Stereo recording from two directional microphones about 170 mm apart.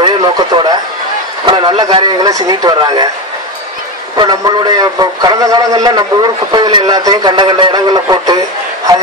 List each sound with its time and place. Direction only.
0.0 s radio: 30° right (ahead or behind)
1.4 s a man's voice: 30° right (ahead or behind)
4.2 s a man's voice: 25° right (ahead or behind)